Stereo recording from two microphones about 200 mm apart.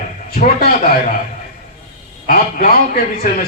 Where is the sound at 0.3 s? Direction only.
50° left (ahead or behind).